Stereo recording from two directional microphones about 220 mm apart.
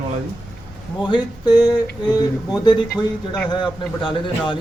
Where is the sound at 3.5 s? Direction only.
20° left (ahead or behind).